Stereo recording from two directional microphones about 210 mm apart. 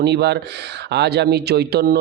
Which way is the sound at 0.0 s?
50° right (ahead or behind).